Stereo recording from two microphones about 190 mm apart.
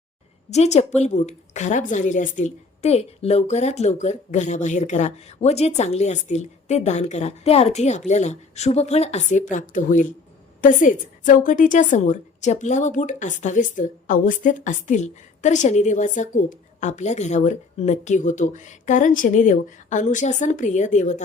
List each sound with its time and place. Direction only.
0.5 s a woman's voice: 35° left (ahead or behind)